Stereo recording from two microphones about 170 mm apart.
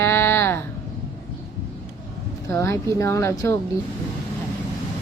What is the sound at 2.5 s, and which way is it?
Speech, 15° left (ahead or behind).